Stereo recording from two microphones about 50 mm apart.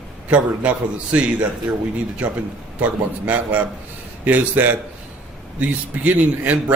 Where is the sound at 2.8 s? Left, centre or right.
Right.